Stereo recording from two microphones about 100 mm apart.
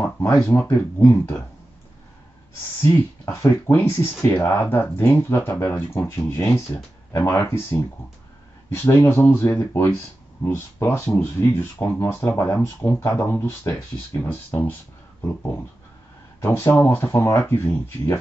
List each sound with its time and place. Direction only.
0.5 s speech: 25° left (ahead or behind)
3.3 s speech: 25° left (ahead or behind)